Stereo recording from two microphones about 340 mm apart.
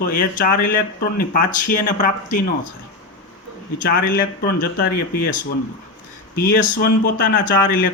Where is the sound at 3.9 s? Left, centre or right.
Left.